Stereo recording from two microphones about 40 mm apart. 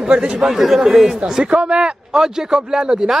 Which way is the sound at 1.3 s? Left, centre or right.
Right.